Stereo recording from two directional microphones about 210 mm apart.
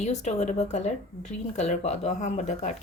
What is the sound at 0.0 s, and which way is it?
Speech, 30° left (ahead or behind).